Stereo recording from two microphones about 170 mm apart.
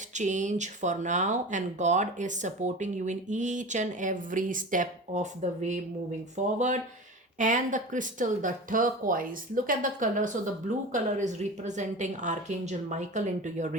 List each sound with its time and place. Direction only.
0.1 s speech: 45° right (ahead or behind)